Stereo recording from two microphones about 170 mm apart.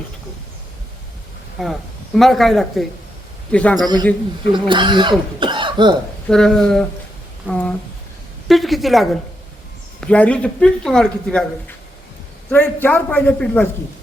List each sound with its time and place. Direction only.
1.6 s a man's voice: centre (ahead or behind)
4.5 s speech: 30° right (ahead or behind)
6.2 s speech: 5° left (ahead or behind)
8.4 s a sound: centre (ahead or behind)
10.0 s speech: 5° left (ahead or behind)
12.5 s a man's voice: 10° left (ahead or behind)